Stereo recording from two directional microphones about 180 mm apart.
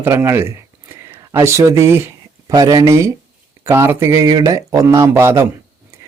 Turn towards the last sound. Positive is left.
turn(degrees=-15)  # may be behind; listen again after turning